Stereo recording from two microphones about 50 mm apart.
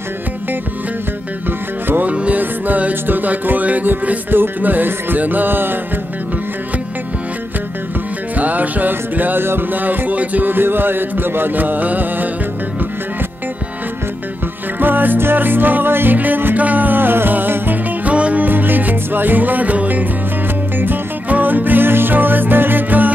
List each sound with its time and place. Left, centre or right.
1.9 s music: right
8.4 s music: right
14.8 s music: right
18.1 s music: right